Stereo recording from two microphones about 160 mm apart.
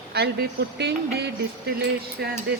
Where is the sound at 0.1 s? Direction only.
90° right.